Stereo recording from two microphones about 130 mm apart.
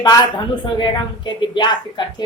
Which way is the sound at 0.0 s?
35° left (ahead or behind).